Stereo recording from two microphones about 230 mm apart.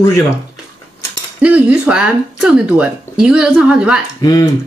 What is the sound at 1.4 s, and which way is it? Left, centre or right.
Speech, centre.